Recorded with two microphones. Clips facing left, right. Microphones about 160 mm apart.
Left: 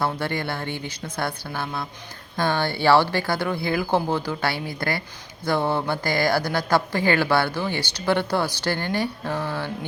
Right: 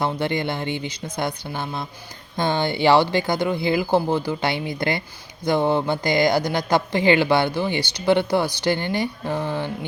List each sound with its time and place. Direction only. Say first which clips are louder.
0.0 s a man's voice: right 3 dB; 15° right (ahead or behind)